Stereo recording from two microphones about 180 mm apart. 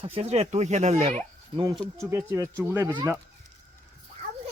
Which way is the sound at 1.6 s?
20° right (ahead or behind).